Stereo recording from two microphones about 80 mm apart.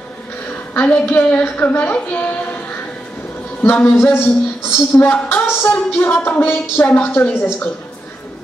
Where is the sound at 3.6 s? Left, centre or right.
Left.